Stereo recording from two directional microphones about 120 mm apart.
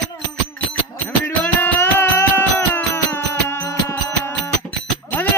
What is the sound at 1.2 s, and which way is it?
Music, 15° left (ahead or behind).